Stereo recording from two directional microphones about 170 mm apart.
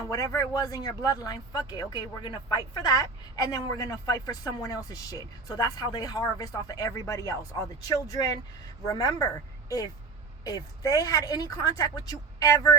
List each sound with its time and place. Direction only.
0.3 s speech: 20° left (ahead or behind)